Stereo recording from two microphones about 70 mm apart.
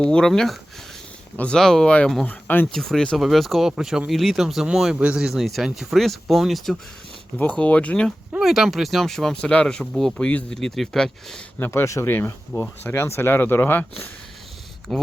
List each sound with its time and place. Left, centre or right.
0.0 s speech: centre
2.2 s speech: left
2.7 s speech: centre
7.3 s speech: centre
8.4 s speech: centre
9.8 s speech: centre
10.2 s speech: centre
11.6 s speech: left
14.9 s speech: centre